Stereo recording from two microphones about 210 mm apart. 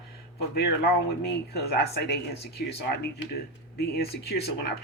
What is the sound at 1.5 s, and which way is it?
Speech, 50° left (ahead or behind).